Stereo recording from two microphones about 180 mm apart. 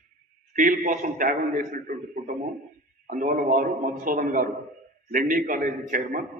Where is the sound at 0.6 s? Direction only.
45° right (ahead or behind).